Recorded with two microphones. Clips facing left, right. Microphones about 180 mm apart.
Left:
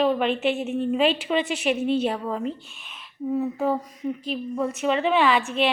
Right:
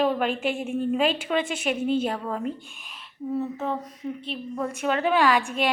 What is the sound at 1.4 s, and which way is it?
Speech, 50° right (ahead or behind).